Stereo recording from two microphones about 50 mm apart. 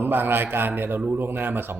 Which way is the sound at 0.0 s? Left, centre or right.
Right.